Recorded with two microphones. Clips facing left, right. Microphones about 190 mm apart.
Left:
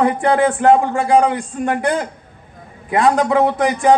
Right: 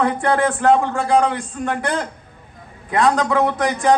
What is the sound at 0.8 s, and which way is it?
A man's voice, 15° left (ahead or behind).